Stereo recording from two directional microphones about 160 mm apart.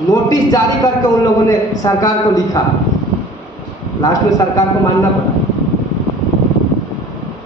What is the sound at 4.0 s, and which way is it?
Speech, 20° left (ahead or behind).